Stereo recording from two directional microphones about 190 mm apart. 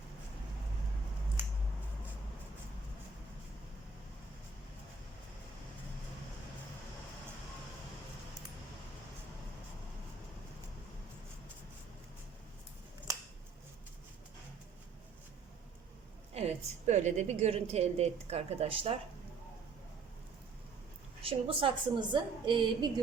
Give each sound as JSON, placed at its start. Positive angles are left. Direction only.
{"t": 16.3, "sound": "a woman's voice", "side_deg": -35}
{"t": 21.2, "sound": "a woman's voice", "side_deg": -30}